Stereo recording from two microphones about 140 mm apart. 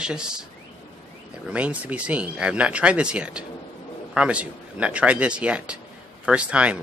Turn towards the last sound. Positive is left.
turn(degrees=-10)  # may be behind; listen again after turning